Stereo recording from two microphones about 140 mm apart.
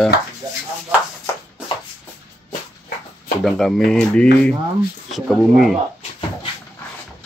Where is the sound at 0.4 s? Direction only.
30° right (ahead or behind).